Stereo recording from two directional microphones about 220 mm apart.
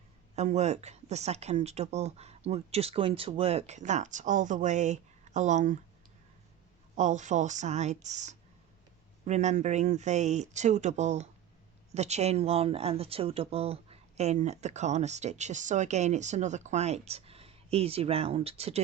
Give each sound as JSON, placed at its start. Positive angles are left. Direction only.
{"t": 0.3, "sound": "speech", "side_deg": -30}
{"t": 6.9, "sound": "speech", "side_deg": -30}